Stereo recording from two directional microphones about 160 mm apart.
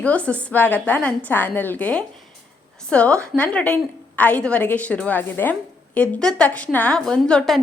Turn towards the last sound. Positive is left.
turn(degrees=5)  # may be behind; listen again after turning